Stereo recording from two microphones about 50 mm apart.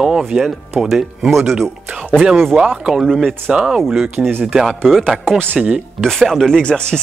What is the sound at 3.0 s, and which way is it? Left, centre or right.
Speech, centre.